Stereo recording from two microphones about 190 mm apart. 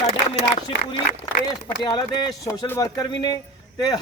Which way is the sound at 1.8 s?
20° left (ahead or behind).